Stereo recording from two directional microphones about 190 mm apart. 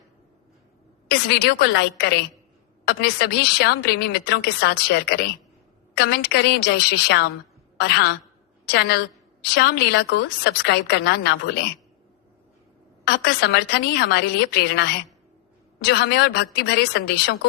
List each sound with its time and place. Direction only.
1.1 s a woman's voice: 60° left (ahead or behind)
13.1 s a woman's voice: 55° left (ahead or behind)
15.9 s a woman's voice: 60° left (ahead or behind)